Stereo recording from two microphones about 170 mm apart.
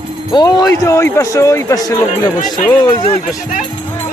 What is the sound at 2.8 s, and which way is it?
Speech, 25° left (ahead or behind).